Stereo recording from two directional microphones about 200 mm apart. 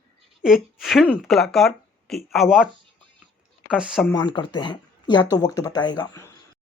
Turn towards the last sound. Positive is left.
turn(degrees=20)  # may be behind; listen again after turning